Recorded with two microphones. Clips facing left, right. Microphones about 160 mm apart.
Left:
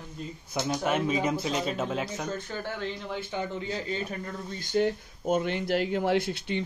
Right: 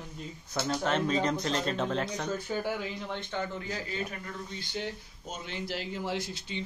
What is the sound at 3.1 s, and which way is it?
Speech, 10° left (ahead or behind).